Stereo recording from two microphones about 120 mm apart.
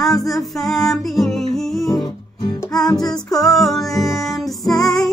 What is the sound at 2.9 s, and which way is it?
Music, 35° left (ahead or behind).